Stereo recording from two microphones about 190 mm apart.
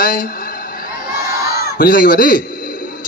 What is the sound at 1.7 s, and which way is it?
A man's voice, 50° left (ahead or behind).